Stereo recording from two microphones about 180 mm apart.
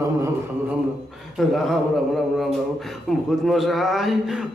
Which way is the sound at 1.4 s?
Centre (ahead or behind).